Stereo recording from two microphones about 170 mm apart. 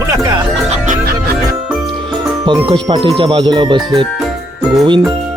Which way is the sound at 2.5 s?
25° right (ahead or behind).